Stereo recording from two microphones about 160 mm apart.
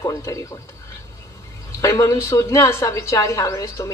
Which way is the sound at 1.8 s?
20° left (ahead or behind).